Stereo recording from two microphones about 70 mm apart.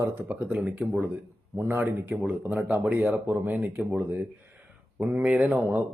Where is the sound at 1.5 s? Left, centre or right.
Right; by 3.2 s centre.